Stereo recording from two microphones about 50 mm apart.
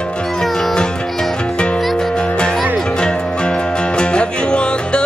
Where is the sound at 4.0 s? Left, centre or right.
Centre.